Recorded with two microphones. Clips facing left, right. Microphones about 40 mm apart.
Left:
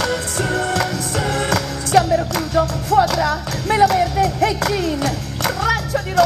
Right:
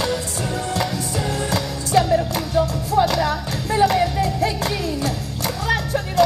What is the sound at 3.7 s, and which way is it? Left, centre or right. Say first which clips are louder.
Music: left 3 dB; left.